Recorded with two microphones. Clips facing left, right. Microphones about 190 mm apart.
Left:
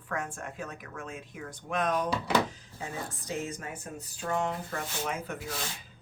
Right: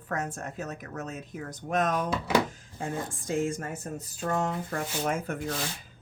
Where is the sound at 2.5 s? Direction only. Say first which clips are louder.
Right 5 dB; 50° right (ahead or behind).